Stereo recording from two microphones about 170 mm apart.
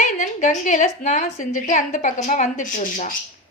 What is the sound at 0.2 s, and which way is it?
A woman's voice, 45° left (ahead or behind).